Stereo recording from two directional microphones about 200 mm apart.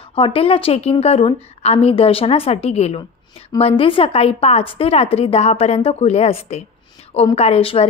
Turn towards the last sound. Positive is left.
turn(degrees=30)  # may be behind; listen again after turning